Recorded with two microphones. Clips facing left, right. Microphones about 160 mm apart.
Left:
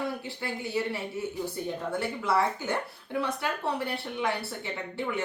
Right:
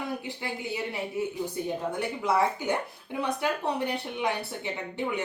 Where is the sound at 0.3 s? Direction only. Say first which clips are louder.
Right 1 dB; 15° right (ahead or behind).